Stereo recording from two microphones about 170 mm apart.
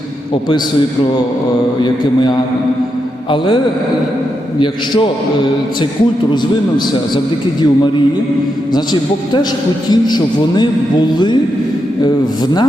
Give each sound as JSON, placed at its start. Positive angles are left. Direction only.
{"t": 1.8, "sound": "a man's voice", "side_deg": 25}
{"t": 8.7, "sound": "a man's voice", "side_deg": 25}